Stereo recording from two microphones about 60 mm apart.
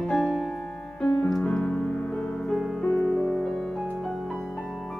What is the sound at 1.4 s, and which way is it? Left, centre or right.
Piano, centre.